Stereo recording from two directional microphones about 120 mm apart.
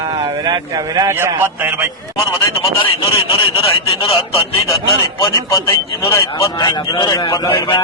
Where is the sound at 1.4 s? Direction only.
20° right (ahead or behind).